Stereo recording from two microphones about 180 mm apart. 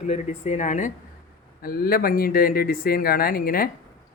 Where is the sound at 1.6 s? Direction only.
55° left (ahead or behind).